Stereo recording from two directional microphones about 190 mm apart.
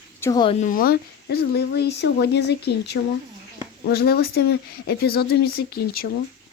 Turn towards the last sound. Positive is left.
turn(degrees=55)  # may be behind; listen again after turning